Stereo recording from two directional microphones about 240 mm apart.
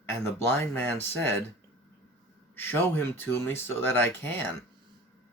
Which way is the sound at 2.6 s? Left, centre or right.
Centre.